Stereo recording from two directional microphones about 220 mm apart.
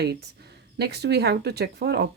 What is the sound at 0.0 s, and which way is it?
Speech, 45° right (ahead or behind).